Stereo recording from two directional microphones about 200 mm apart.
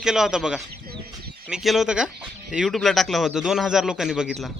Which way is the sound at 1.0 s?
50° right (ahead or behind).